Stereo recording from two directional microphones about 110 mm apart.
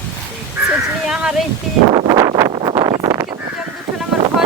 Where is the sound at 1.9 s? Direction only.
45° right (ahead or behind).